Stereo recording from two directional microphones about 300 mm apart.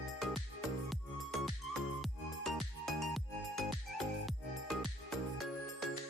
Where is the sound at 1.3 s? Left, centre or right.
Centre.